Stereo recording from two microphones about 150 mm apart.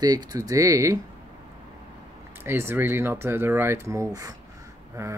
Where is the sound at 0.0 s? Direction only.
25° right (ahead or behind).